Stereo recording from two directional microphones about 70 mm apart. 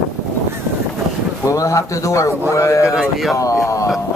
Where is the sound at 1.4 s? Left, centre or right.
Left.